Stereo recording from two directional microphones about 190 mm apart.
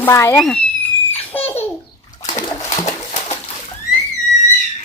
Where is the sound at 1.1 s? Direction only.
10° left (ahead or behind).